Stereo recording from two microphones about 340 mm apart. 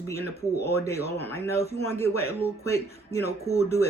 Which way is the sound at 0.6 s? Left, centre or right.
Centre.